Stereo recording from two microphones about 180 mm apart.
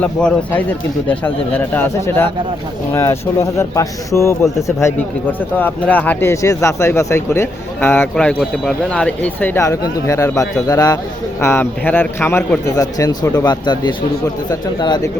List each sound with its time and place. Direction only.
0.0 s speech: 5° left (ahead or behind)
5.5 s speech: 10° left (ahead or behind)